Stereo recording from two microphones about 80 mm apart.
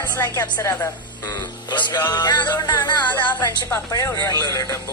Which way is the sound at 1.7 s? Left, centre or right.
Left.